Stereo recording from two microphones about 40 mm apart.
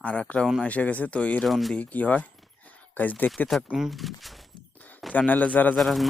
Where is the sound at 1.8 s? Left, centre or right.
Left.